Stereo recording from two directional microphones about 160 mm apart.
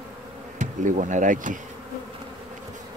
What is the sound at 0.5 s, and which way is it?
Bee, 50° right (ahead or behind).